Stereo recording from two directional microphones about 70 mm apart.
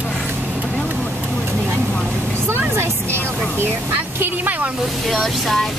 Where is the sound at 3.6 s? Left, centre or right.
Right.